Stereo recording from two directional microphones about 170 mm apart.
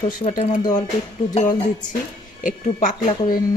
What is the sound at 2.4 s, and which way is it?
Speech, 50° left (ahead or behind).